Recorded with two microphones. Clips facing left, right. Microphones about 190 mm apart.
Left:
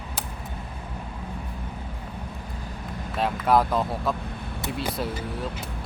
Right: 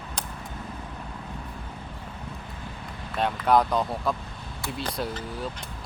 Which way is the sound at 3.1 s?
Centre (ahead or behind).